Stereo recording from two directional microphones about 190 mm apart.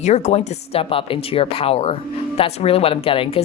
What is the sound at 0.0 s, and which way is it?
A woman's voice, 35° left (ahead or behind).